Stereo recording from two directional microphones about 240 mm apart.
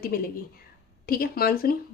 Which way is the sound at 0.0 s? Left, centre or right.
Left.